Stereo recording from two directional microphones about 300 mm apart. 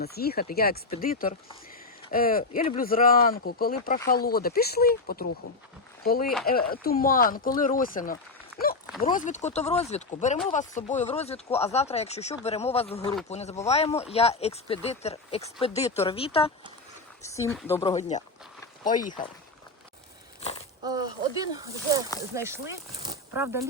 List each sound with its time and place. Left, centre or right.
0.0 s speech: left; by 17.9 s centre
18.8 s speech: left
20.4 s a sound: centre
20.8 s speech: centre